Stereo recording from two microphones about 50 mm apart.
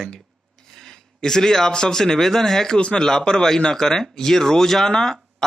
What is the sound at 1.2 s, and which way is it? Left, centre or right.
Speech, centre.